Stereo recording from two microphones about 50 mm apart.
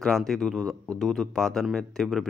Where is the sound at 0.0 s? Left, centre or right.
Centre.